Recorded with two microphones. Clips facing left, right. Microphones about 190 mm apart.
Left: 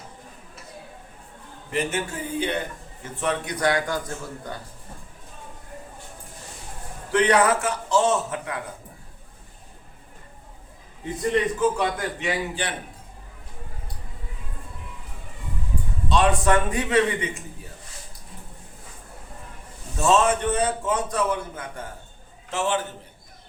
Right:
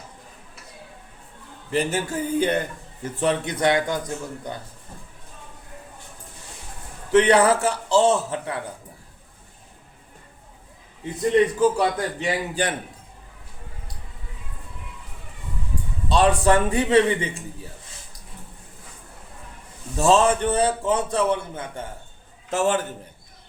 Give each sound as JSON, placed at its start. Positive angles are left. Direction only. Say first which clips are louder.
{"t": 1.7, "sound": "a man's voice", "louder": "right 3 dB", "side_deg": -35}
{"t": 3.0, "sound": "a man's voice", "louder": "right 4 dB", "side_deg": -30}
{"t": 7.1, "sound": "a man's voice", "louder": "right 3 dB", "side_deg": -30}
{"t": 11.6, "sound": "a man's voice", "louder": "right 3 dB", "side_deg": -35}
{"t": 16.0, "sound": "a man's voice", "louder": "right 2 dB", "side_deg": -35}
{"t": 20.0, "sound": "a man's voice", "louder": "right 2 dB", "side_deg": -30}
{"t": 22.4, "sound": "a man's voice", "louder": "right 4 dB", "side_deg": -45}